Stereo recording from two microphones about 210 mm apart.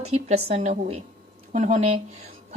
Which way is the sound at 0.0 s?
30° right (ahead or behind).